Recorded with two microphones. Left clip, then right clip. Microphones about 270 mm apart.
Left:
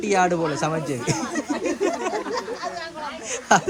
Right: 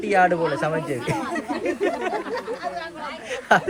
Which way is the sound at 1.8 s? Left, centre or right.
Centre.